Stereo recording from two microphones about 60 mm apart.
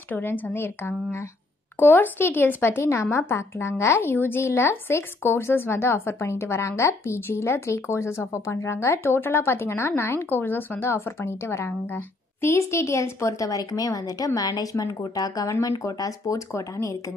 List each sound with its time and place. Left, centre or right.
0.1 s speech: left
2.8 s a woman's voice: left
15.6 s speech: left